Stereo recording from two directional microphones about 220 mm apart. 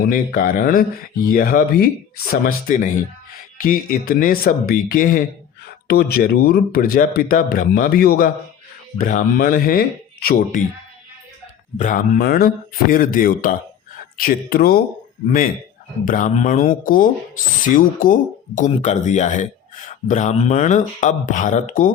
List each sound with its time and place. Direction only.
0.0 s speech: 40° left (ahead or behind)
11.8 s speech: 40° left (ahead or behind)
16.0 s speech: 35° left (ahead or behind)